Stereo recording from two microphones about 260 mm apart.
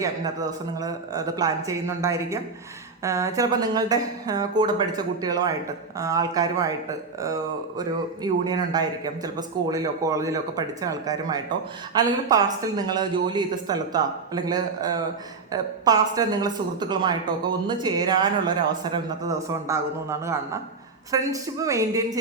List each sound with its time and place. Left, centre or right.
0.8 s a woman's voice: centre
7.8 s a woman's voice: centre